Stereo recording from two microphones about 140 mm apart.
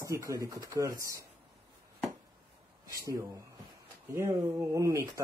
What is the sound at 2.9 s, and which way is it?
Speech, 20° right (ahead or behind).